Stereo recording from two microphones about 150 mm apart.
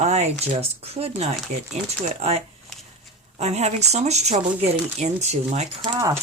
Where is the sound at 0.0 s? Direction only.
50° right (ahead or behind).